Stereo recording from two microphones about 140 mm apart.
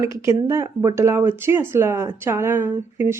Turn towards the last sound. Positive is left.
turn(degrees=-15)  # may be behind; listen again after turning